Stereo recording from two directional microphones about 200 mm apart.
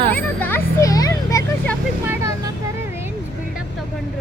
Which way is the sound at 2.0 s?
10° right (ahead or behind).